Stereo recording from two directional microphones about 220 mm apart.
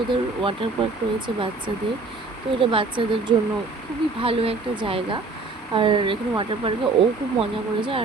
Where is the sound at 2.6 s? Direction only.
25° right (ahead or behind).